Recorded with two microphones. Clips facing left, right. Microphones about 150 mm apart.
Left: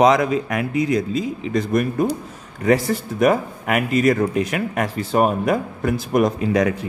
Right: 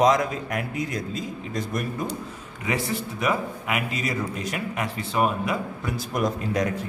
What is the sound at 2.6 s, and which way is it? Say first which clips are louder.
A man's voice: left 9 dB; 45° left (ahead or behind).